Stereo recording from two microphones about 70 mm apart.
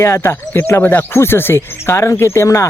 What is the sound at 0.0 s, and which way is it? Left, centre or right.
Speech, left.